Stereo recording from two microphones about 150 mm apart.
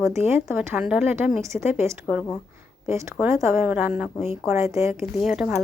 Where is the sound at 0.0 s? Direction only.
15° right (ahead or behind).